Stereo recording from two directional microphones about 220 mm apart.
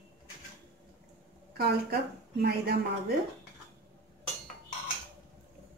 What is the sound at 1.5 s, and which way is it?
A woman's voice, 45° right (ahead or behind).